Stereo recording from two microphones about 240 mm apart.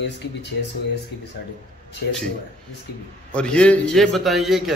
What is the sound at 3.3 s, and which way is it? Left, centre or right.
A man's voice, centre.